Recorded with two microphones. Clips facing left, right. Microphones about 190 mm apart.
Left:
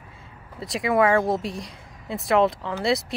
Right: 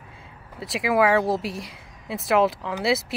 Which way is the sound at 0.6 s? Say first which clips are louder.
Even; centre (ahead or behind).